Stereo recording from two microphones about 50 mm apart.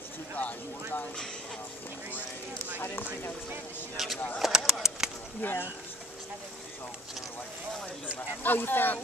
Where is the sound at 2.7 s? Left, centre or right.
Left.